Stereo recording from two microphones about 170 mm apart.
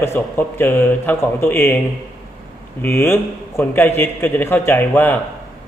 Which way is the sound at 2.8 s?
15° left (ahead or behind).